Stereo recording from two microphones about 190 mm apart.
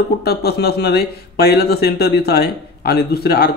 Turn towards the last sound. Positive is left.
turn(degrees=55)  # may be behind; listen again after turning